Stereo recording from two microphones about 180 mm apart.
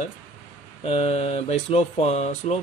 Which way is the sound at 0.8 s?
35° left (ahead or behind).